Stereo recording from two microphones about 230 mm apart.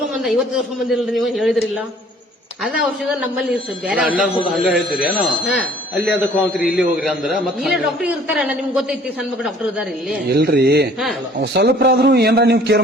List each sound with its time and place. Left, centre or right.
0.9 s a man's voice: centre
10.3 s a man's voice: right